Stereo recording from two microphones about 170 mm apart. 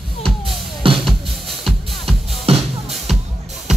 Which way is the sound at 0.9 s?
30° right (ahead or behind).